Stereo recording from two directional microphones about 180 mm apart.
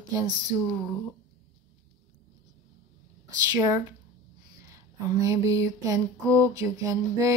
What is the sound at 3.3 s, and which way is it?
Speech, 20° right (ahead or behind).